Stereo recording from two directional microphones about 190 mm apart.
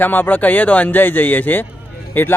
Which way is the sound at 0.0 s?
10° left (ahead or behind).